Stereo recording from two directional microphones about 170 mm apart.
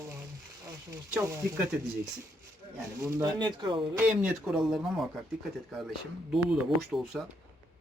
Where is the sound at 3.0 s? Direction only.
20° right (ahead or behind).